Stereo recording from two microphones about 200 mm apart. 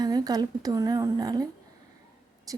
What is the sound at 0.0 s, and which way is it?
A woman's voice, 20° right (ahead or behind).